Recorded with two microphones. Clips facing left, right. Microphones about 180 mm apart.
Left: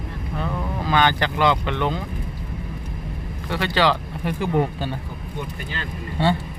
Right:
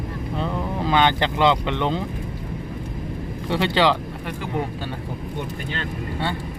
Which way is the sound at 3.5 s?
20° right (ahead or behind).